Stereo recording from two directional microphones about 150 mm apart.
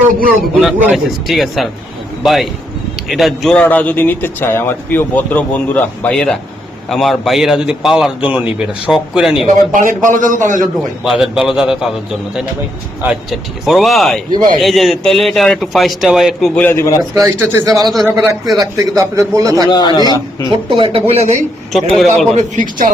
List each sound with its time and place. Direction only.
0.9 s a man's voice: centre (ahead or behind)
9.7 s a man's voice: 60° right (ahead or behind)
11.0 s a man's voice: 5° right (ahead or behind)
13.0 s a man's voice: 5° right (ahead or behind)
14.3 s a man's voice: 30° right (ahead or behind)
14.6 s a man's voice: centre (ahead or behind)
16.6 s a man's voice: 15° left (ahead or behind)
17.2 s speech: 15° right (ahead or behind)
17.9 s a man's voice: centre (ahead or behind)
18.5 s a man's voice: 25° right (ahead or behind)
19.7 s a man's voice: 25° left (ahead or behind)
20.7 s speech: 35° right (ahead or behind)
21.7 s a man's voice: centre (ahead or behind)
22.3 s a man's voice: 55° right (ahead or behind)